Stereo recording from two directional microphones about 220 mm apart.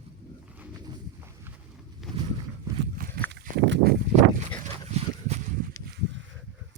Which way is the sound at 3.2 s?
50° right (ahead or behind).